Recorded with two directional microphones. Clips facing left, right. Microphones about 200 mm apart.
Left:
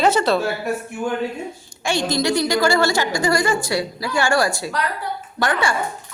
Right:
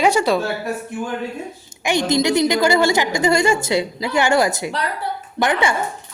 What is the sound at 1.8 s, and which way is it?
A woman's voice, 20° right (ahead or behind).